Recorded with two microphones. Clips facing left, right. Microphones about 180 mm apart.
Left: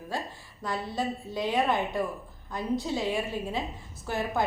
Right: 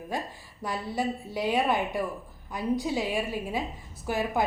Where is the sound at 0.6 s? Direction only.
10° right (ahead or behind).